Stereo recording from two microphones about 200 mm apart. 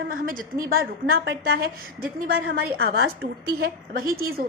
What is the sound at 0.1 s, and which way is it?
A woman's voice, 45° right (ahead or behind).